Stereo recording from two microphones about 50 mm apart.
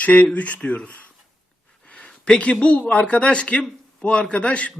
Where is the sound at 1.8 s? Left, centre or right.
Left.